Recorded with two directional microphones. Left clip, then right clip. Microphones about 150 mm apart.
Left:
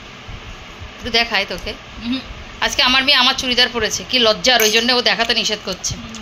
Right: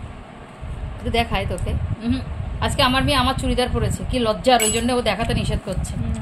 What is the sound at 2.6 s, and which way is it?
A woman's voice, 10° right (ahead or behind).